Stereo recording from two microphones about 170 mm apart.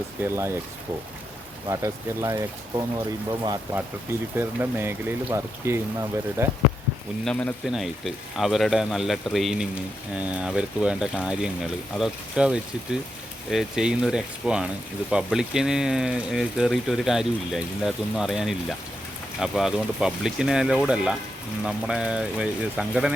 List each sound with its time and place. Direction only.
0.2 s speech: 15° right (ahead or behind)
1.6 s speech: 20° right (ahead or behind)
7.3 s speech: 5° left (ahead or behind)